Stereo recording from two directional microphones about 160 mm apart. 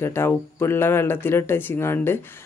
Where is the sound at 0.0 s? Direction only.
15° left (ahead or behind).